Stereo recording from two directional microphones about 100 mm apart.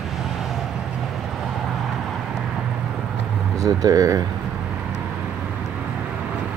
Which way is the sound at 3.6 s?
35° right (ahead or behind).